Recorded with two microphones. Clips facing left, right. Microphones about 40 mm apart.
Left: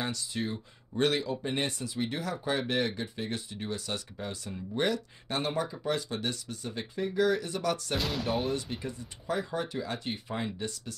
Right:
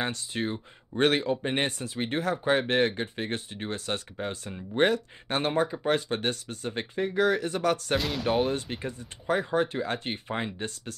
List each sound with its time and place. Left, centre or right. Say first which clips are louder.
0.0 s speech: right 3 dB; right
8.0 s speech: right 2 dB; centre
8.5 s speech: right 2 dB; right